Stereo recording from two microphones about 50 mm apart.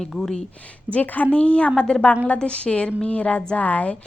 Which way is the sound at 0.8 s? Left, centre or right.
Left.